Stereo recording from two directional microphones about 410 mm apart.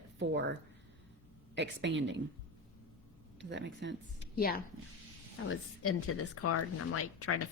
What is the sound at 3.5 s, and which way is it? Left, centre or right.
Speech, right.